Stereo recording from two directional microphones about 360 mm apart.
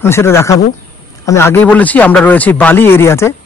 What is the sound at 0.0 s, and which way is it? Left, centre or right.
A man's voice, centre.